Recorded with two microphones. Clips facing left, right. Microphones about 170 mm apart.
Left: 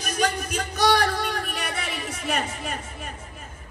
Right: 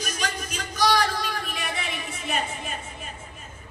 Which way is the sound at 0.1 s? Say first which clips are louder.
Left 6 dB; 60° left (ahead or behind).